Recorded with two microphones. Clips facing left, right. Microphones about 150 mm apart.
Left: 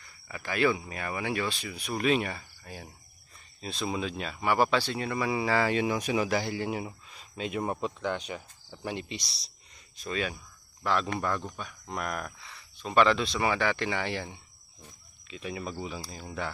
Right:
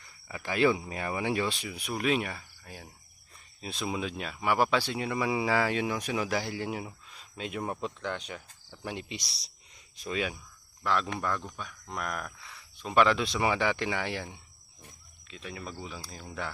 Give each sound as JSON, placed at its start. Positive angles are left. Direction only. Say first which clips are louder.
{"t": 0.3, "sound": "speech", "louder": "right 1 dB", "side_deg": -20}
{"t": 1.9, "sound": "speech", "louder": "left 2 dB", "side_deg": -5}
{"t": 10.8, "sound": "speech", "louder": "left 1 dB", "side_deg": 0}
{"t": 15.3, "sound": "speech", "louder": "left 5 dB", "side_deg": 10}